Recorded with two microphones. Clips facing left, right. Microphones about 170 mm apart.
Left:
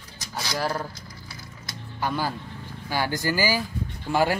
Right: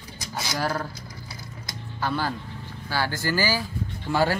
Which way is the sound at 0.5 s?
10° left (ahead or behind).